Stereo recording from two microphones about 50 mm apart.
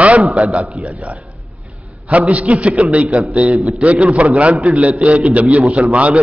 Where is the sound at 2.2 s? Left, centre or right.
Right.